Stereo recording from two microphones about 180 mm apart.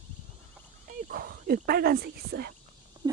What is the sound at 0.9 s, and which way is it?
Speech, 50° right (ahead or behind).